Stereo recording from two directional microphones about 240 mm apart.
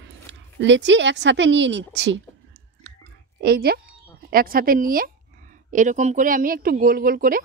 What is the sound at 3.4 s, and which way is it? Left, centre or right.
A woman's voice, right.